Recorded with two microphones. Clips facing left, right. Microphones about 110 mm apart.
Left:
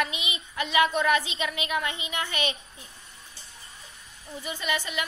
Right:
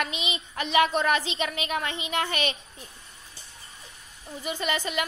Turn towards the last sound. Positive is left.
turn(degrees=-45)  # may be behind; listen again after turning